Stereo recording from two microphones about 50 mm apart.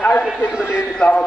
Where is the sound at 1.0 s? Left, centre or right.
Centre.